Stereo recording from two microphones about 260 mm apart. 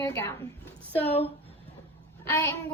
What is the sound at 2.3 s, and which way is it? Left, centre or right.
Speech, centre.